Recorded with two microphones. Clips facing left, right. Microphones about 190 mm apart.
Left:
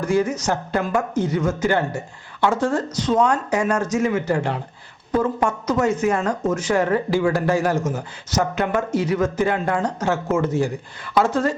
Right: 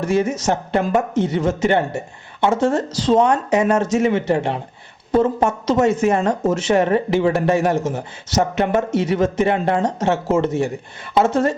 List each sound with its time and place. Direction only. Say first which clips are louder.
0.0 s speech: right 2 dB; 25° right (ahead or behind)